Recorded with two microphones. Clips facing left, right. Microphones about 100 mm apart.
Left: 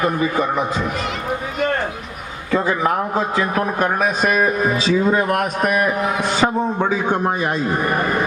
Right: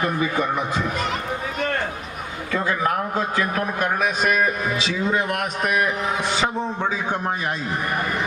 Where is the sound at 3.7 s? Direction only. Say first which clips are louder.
Left 3 dB; 40° left (ahead or behind).